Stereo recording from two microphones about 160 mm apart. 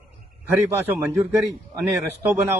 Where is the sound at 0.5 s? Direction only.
15° right (ahead or behind).